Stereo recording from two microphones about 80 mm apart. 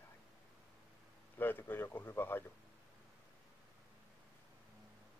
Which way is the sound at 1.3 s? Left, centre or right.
Left.